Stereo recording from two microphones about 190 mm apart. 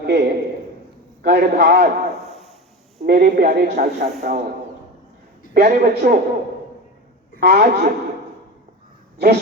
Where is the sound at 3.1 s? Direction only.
55° right (ahead or behind).